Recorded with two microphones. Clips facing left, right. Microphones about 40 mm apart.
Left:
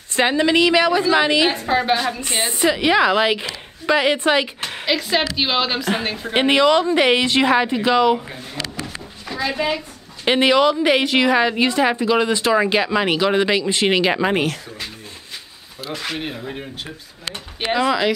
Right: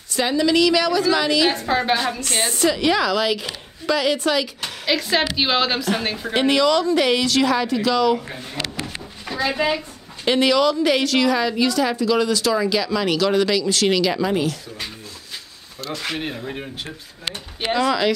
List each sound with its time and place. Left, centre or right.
0.1 s a woman's voice: left
1.5 s a woman's voice: centre
2.1 s a woman's voice: centre
4.8 s a woman's voice: centre
6.3 s a woman's voice: left
8.8 s a sound: centre
10.2 s a woman's voice: left
15.8 s a woman's voice: centre
17.7 s speech: centre